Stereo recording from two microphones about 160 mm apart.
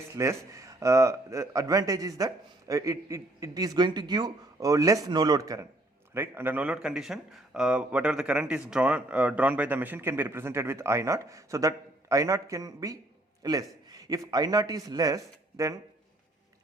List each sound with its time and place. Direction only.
0.2 s a man's voice: 20° right (ahead or behind)